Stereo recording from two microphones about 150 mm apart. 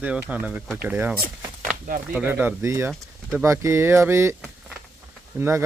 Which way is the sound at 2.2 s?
10° right (ahead or behind).